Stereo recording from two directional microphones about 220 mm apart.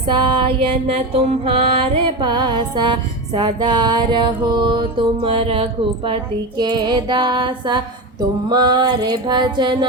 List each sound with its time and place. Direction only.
0.0 s mantra: 20° right (ahead or behind)